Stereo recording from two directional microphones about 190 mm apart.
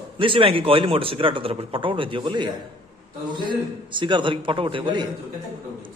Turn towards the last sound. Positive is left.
turn(degrees=-25)  # may be behind; listen again after turning